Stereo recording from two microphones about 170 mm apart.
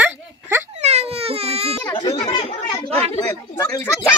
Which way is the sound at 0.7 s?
40° right (ahead or behind).